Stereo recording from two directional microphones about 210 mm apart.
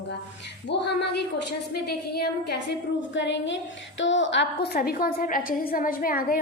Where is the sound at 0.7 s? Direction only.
55° left (ahead or behind).